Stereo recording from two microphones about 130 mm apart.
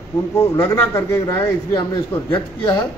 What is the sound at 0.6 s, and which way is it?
A man's voice, 25° left (ahead or behind).